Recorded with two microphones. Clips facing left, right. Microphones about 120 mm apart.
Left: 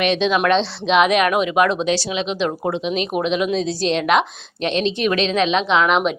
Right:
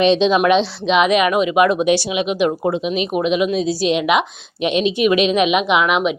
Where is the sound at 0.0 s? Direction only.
25° right (ahead or behind).